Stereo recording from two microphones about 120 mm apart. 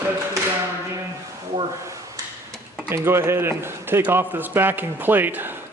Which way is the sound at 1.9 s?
25° right (ahead or behind).